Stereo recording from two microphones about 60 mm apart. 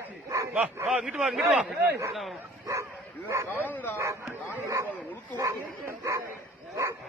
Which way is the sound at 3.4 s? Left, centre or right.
Left.